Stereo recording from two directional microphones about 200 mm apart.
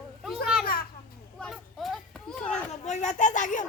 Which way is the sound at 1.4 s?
Centre (ahead or behind).